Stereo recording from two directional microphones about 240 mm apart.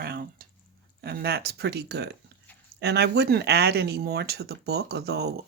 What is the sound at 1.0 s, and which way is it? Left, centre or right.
Speech, right.